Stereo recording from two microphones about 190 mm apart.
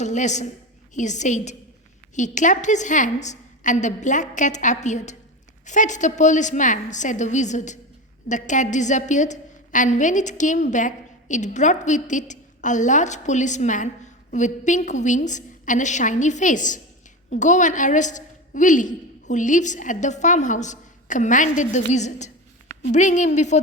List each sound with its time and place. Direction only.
0.0 s a woman's voice: 40° left (ahead or behind)